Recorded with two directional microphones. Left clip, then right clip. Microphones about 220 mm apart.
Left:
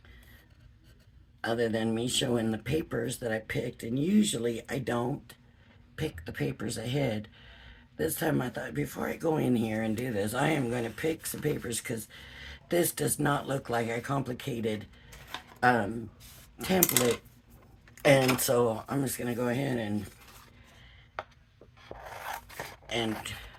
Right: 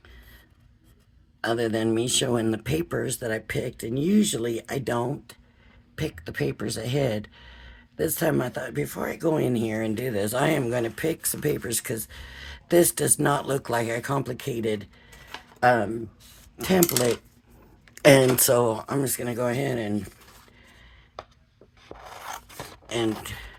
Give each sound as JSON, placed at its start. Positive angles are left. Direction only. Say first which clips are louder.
{"t": 1.4, "sound": "speech", "louder": "right 4 dB", "side_deg": -45}
{"t": 17.9, "sound": "speech", "louder": "right 7 dB", "side_deg": -40}
{"t": 21.8, "sound": "filing", "louder": "right 1 dB", "side_deg": -5}
{"t": 23.2, "sound": "speech", "louder": "right 2 dB", "side_deg": -45}